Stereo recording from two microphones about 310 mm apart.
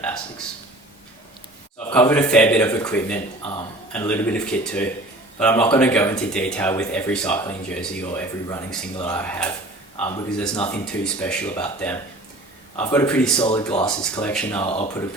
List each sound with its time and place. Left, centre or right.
0.0 s speech: centre
1.9 s speech: centre
13.4 s speech: centre
13.7 s speech: centre
14.6 s speech: centre